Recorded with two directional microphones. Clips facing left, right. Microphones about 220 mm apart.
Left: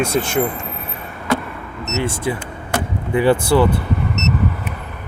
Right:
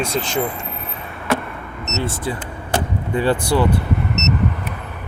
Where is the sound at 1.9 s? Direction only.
15° left (ahead or behind).